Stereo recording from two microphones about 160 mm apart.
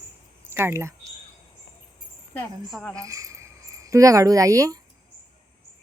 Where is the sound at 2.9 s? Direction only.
20° right (ahead or behind).